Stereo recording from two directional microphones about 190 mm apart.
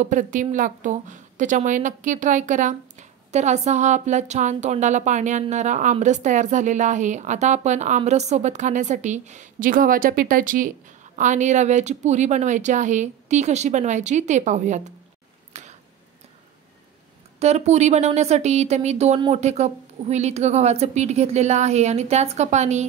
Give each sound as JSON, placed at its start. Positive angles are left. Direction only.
{"t": 0.0, "sound": "a woman's voice", "side_deg": -40}
{"t": 15.5, "sound": "a sound", "side_deg": -35}
{"t": 17.4, "sound": "a woman's voice", "side_deg": -35}